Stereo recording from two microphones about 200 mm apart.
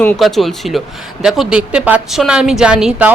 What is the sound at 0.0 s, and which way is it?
A woman's voice, 5° left (ahead or behind).